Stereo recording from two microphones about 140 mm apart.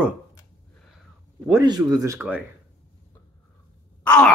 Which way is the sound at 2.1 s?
10° right (ahead or behind).